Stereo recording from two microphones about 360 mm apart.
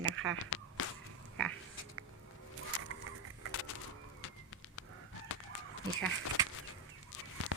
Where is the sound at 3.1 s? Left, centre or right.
Right.